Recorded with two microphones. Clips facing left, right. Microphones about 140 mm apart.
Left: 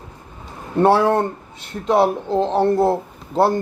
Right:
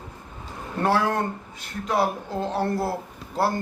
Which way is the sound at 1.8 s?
25° left (ahead or behind).